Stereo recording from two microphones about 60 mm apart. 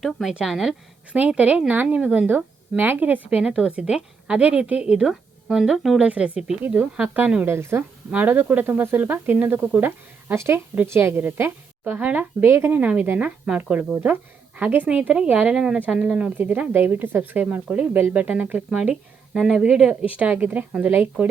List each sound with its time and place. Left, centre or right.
0.0 s a woman's voice: centre
1.1 s speech: right
3.2 s a woman's voice: centre
6.0 s speech: right
7.4 s a woman's voice: right
8.1 s speech: right
10.3 s a woman's voice: right
12.7 s speech: right
13.7 s speech: right
14.8 s a woman's voice: centre
16.4 s speech: right
17.4 s speech: right
18.7 s speech: centre